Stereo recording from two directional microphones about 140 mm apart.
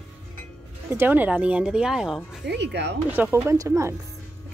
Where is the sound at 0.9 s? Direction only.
10° right (ahead or behind).